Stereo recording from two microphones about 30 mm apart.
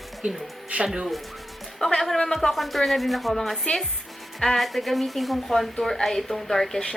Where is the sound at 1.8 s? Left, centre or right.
Centre.